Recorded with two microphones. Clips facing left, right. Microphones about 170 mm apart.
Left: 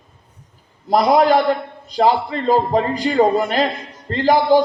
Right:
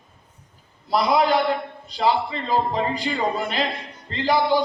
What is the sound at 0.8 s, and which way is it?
A man's voice, 40° left (ahead or behind).